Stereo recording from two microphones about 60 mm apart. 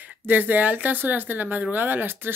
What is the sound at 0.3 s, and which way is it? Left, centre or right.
Speech, right.